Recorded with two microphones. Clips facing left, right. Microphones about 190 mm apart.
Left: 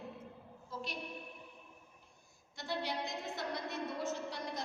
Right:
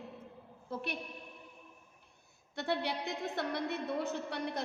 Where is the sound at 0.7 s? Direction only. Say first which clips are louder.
Right 5 dB; 60° right (ahead or behind).